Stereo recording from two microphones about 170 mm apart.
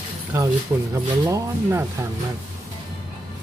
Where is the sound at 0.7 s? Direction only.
15° right (ahead or behind).